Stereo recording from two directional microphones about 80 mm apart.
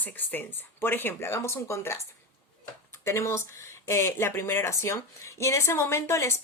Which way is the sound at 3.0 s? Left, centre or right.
Left.